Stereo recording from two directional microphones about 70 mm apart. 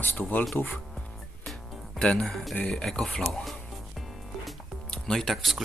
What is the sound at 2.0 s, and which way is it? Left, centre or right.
Speech, centre.